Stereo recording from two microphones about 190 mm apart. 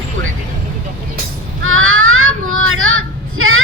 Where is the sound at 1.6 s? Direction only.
90° right.